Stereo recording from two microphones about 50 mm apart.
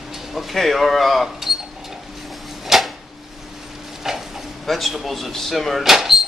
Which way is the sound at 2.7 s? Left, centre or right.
Centre.